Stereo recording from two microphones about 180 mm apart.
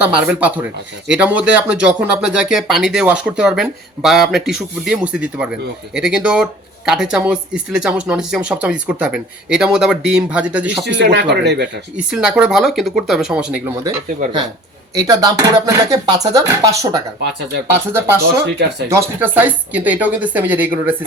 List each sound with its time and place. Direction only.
0.0 s speech: 5° right (ahead or behind)
10.8 s speech: 70° right (ahead or behind)
11.9 s speech: 5° right (ahead or behind)
14.9 s speech: 20° right (ahead or behind)